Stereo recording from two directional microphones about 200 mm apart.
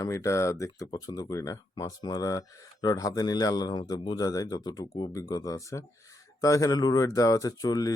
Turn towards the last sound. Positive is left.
turn(degrees=20)  # may be behind; listen again after turning